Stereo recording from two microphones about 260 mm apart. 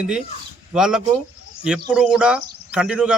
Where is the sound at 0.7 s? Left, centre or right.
Centre.